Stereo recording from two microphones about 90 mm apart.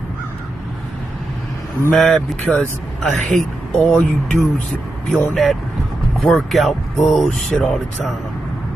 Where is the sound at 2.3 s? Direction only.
15° left (ahead or behind).